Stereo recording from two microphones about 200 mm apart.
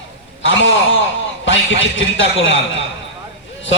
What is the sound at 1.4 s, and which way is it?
A man's voice, 70° left (ahead or behind).